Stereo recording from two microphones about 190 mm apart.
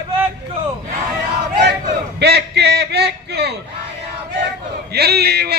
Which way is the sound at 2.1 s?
60° right (ahead or behind).